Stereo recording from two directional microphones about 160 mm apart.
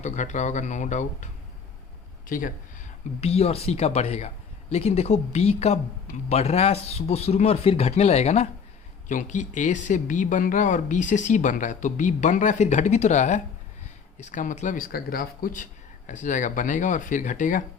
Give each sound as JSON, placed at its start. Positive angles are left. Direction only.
{"t": 0.0, "sound": "speech", "side_deg": 50}
{"t": 3.2, "sound": "speech", "side_deg": 40}